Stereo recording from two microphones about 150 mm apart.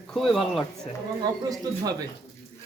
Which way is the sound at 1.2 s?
25° right (ahead or behind).